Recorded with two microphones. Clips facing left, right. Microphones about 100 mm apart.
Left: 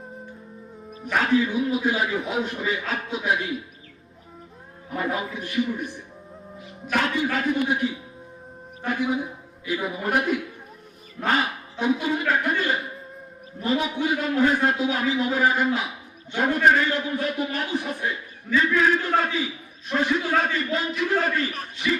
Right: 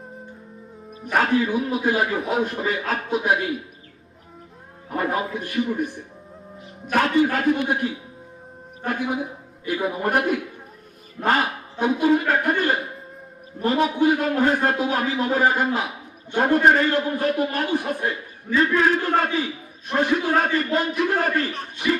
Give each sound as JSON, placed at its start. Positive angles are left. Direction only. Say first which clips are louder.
{"t": 1.1, "sound": "a man's voice", "louder": "right 1 dB", "side_deg": -45}
{"t": 4.9, "sound": "a man's voice", "louder": "right 3 dB", "side_deg": -45}
{"t": 6.8, "sound": "a man's voice", "louder": "right 5 dB", "side_deg": -45}
{"t": 9.6, "sound": "a man's voice", "louder": "right 3 dB", "side_deg": -50}